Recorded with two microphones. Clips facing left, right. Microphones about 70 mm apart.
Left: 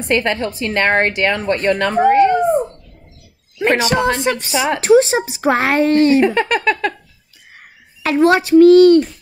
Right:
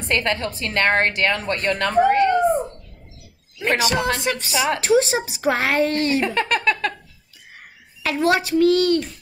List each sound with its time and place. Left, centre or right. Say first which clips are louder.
0.1 s a woman's voice: left 5 dB; centre
3.7 s a woman's voice: left 4 dB; left
6.2 s a woman's voice: left 5 dB; centre
8.0 s a woman's voice: left 6 dB; left